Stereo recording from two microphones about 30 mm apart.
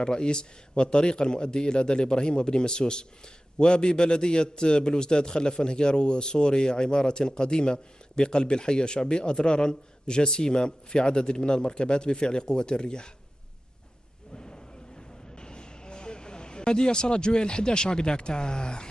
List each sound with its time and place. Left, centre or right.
0.0 s a man's voice: left
14.3 s a sound: left
15.3 s speech: left